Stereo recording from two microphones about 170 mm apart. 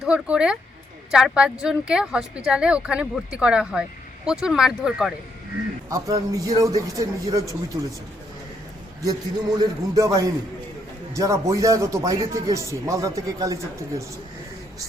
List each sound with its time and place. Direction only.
0.0 s speech: 5° right (ahead or behind)
5.9 s speech: 20° right (ahead or behind)
9.6 s speech: 20° right (ahead or behind)